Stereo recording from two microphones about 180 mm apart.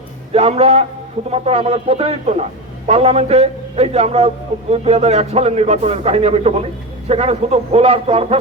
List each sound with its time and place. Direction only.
0.3 s a man's voice: 35° right (ahead or behind)